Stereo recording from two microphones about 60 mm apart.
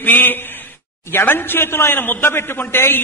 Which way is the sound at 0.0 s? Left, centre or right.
Left.